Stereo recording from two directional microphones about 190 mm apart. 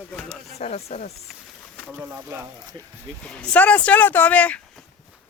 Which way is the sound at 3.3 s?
5° left (ahead or behind).